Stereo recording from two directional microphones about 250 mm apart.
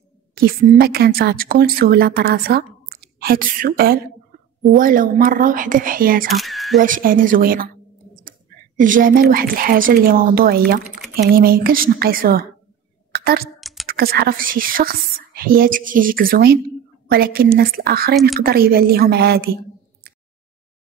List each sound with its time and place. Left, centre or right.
0.3 s a woman's voice: right
6.2 s speech: centre
6.8 s a woman's voice: right
10.8 s typing: centre
11.1 s a woman's voice: right
13.1 s a sound: right
13.6 s a sound: centre
13.8 s a woman's voice: right